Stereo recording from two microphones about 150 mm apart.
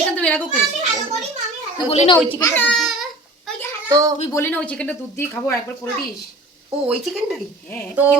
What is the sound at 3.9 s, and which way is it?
Speech, 20° right (ahead or behind).